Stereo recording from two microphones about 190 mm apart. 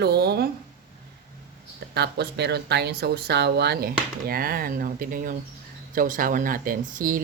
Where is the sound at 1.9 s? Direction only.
60° right (ahead or behind).